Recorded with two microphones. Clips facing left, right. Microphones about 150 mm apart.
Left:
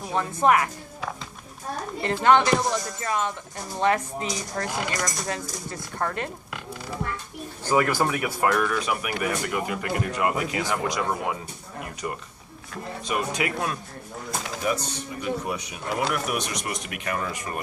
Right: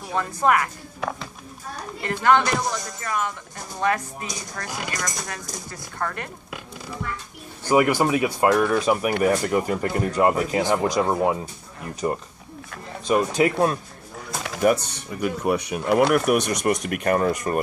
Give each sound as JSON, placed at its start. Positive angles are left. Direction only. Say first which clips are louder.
{"t": 0.1, "sound": "music", "louder": "even", "side_deg": 20}
{"t": 1.0, "sound": "run", "louder": "right 5 dB", "side_deg": -60}
{"t": 2.2, "sound": "music", "louder": "even", "side_deg": 20}
{"t": 7.7, "sound": "speech", "louder": "right 4 dB", "side_deg": -15}
{"t": 8.7, "sound": "speech", "louder": "right 7 dB", "side_deg": -35}
{"t": 14.4, "sound": "speech", "louder": "right 8 dB", "side_deg": -60}